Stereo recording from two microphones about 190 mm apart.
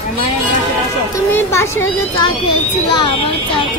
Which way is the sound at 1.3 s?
15° left (ahead or behind).